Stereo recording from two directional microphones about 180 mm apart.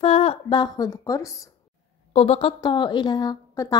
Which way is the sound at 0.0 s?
35° left (ahead or behind).